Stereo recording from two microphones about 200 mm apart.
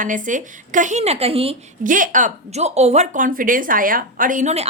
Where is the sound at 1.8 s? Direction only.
40° right (ahead or behind).